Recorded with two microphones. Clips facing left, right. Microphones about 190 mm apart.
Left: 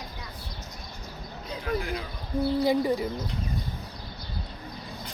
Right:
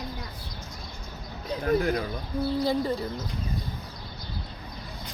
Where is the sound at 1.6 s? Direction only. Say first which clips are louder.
Right 6 dB; 45° right (ahead or behind).